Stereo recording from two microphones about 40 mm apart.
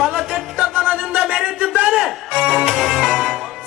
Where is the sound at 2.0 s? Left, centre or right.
Centre.